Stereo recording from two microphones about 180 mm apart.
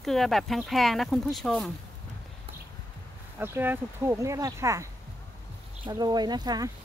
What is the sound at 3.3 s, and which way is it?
Speech, 10° right (ahead or behind).